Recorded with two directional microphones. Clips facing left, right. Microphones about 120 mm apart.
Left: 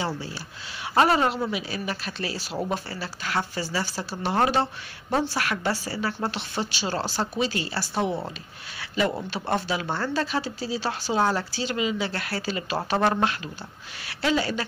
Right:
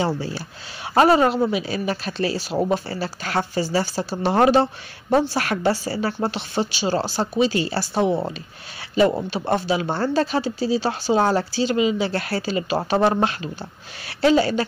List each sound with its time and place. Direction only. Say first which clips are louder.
0.9 s speech: right 5 dB; 35° right (ahead or behind)
6.1 s speech: right 5 dB; 20° right (ahead or behind)